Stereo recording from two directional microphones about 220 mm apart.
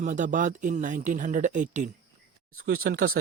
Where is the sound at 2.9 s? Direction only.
40° right (ahead or behind).